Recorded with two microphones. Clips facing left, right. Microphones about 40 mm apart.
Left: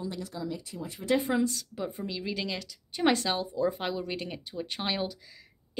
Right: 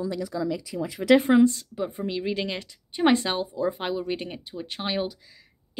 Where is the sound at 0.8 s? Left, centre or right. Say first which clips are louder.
Right 9 dB; right.